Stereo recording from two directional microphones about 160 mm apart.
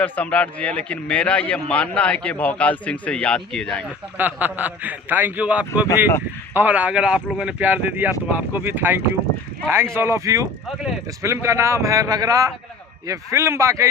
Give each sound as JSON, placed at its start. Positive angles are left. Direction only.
{"t": 0.0, "sound": "a man's voice", "side_deg": 10}
{"t": 4.2, "sound": "a man's voice", "side_deg": -10}